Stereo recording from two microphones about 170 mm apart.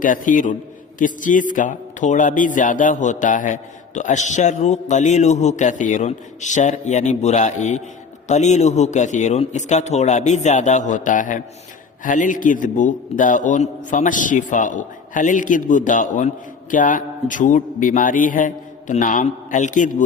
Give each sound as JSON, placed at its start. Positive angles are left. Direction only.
{"t": 0.0, "sound": "speech", "side_deg": 50}